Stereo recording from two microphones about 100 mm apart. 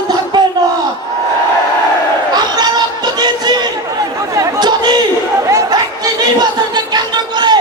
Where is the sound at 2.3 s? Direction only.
45° right (ahead or behind).